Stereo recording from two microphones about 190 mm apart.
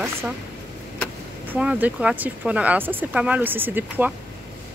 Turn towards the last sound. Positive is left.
turn(degrees=-10)  # may be behind; listen again after turning